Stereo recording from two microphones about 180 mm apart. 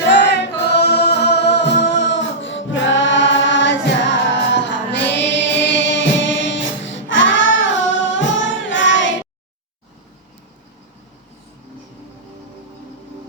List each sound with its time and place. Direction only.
0.1 s music: 70° left (ahead or behind); by 9.1 s 90° left